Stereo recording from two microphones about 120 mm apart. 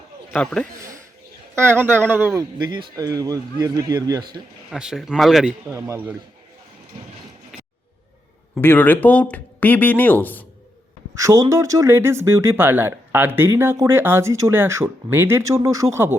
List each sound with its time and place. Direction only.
0.3 s speech: 10° left (ahead or behind)
1.5 s speech: 15° right (ahead or behind)
2.4 s speech: 35° right (ahead or behind)
4.7 s a man's voice: 5° right (ahead or behind)
8.5 s speech: 15° left (ahead or behind)
11.1 s speech: 25° right (ahead or behind)